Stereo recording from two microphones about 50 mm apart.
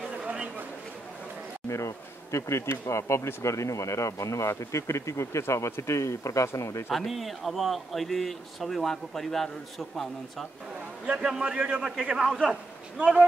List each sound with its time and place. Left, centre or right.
1.7 s speech: left
6.9 s a man's voice: centre
11.1 s a man's voice: centre